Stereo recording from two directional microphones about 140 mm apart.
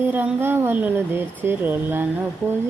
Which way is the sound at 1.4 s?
15° right (ahead or behind).